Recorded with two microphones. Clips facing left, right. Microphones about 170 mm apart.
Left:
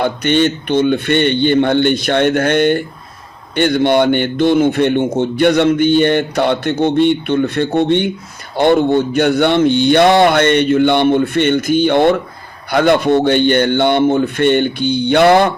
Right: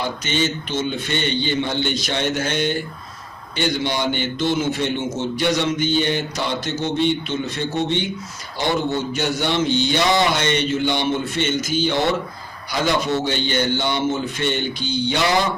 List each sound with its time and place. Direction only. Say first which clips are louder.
0.0 s a man's voice: left 9 dB; 60° left (ahead or behind)